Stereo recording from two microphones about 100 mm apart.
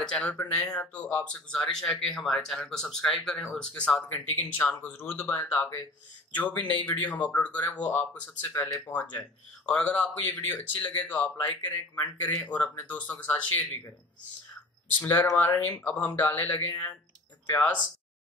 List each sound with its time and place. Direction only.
0.0 s speech: 10° left (ahead or behind); by 5.5 s 25° left (ahead or behind)
6.3 s speech: 15° left (ahead or behind)
15.0 s speech: 15° left (ahead or behind)